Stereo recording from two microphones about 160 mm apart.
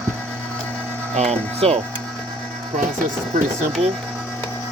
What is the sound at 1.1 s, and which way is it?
Speech, 40° right (ahead or behind).